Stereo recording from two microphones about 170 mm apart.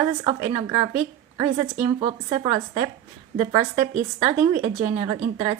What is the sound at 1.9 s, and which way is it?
A woman's voice, 30° right (ahead or behind).